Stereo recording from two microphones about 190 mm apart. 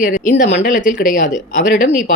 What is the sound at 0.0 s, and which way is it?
Speech, 40° left (ahead or behind).